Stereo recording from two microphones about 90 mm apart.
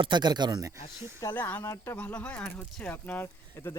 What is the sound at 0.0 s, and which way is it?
Speech, 55° right (ahead or behind).